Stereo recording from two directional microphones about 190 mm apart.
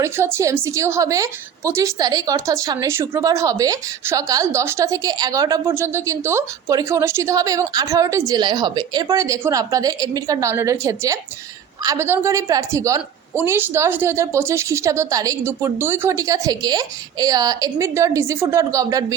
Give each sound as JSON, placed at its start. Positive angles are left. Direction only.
{"t": 0.0, "sound": "a woman's voice", "side_deg": -15}